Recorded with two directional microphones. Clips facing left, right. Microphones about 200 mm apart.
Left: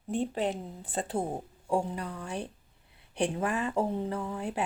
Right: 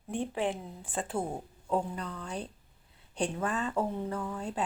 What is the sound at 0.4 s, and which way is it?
Speech, 35° left (ahead or behind).